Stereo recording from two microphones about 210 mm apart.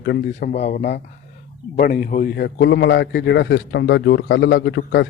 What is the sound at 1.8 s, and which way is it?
A man's voice, 45° left (ahead or behind).